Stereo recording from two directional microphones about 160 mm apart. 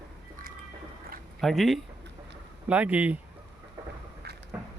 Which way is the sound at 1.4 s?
Centre (ahead or behind).